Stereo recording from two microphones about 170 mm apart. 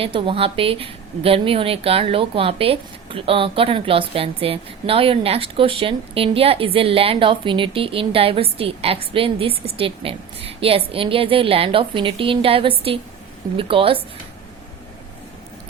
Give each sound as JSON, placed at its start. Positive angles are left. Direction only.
{"t": 0.0, "sound": "a woman's voice", "side_deg": -30}